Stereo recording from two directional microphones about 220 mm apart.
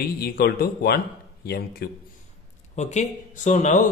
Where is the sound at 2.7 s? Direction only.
35° left (ahead or behind).